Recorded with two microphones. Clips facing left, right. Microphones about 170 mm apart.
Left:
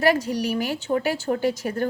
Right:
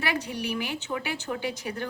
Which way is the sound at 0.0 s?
40° left (ahead or behind).